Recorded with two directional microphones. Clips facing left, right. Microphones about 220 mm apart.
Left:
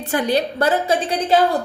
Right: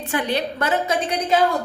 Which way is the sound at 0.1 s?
35° left (ahead or behind).